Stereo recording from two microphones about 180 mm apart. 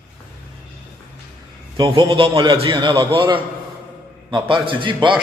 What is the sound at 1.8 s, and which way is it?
A man's voice, 25° right (ahead or behind).